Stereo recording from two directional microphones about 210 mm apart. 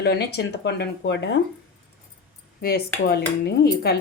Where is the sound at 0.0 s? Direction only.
50° left (ahead or behind).